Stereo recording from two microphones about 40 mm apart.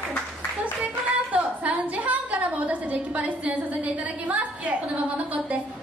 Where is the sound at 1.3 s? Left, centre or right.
Right.